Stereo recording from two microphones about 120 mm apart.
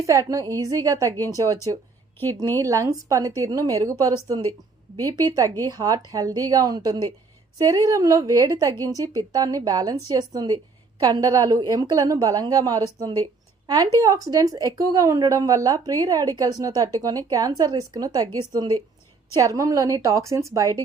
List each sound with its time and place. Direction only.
0.0 s speech: 25° right (ahead or behind)
2.6 s a woman's voice: 30° right (ahead or behind)